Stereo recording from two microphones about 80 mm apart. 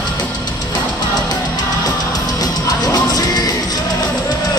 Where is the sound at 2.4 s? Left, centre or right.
Left.